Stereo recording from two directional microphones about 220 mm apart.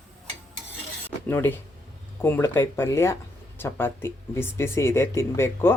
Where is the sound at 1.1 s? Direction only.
10° left (ahead or behind).